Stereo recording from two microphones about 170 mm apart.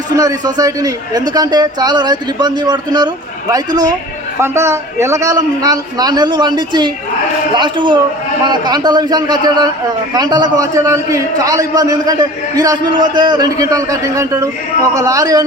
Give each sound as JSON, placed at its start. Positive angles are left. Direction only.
{"t": 0.2, "sound": "a man's voice", "side_deg": -20}